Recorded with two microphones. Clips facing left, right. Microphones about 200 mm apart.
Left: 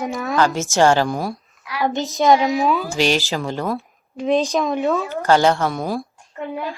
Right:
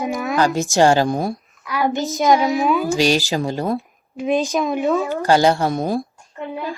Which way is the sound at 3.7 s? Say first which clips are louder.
Right 2 dB; 15° right (ahead or behind).